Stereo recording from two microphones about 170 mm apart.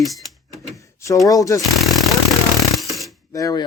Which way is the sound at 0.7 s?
20° left (ahead or behind).